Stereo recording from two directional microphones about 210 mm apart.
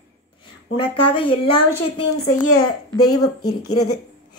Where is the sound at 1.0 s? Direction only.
25° left (ahead or behind).